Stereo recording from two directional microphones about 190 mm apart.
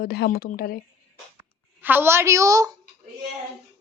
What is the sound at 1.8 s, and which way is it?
Speech, 10° right (ahead or behind).